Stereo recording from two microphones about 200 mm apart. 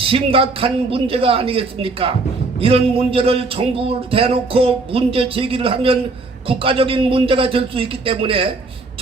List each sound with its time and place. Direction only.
0.0 s a man's voice: 25° right (ahead or behind)